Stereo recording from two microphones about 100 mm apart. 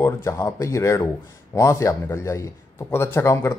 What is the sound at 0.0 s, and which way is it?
A man's voice, 30° left (ahead or behind).